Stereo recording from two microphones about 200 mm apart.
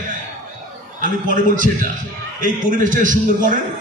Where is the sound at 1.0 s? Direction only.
40° right (ahead or behind).